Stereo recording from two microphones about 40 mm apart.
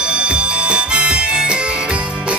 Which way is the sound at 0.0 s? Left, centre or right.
Right.